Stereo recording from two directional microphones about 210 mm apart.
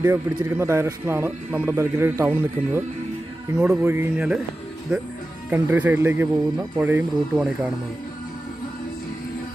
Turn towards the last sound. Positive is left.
turn(degrees=0)  # may be behind; listen again after turning